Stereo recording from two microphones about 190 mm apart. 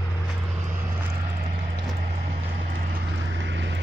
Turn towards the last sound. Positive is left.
turn(degrees=-70)  # may be behind; listen again after turning